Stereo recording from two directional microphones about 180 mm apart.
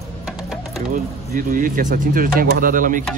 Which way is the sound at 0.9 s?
50° right (ahead or behind).